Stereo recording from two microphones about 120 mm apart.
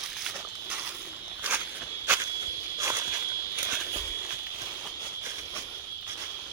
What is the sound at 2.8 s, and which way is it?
Walk, 25° right (ahead or behind).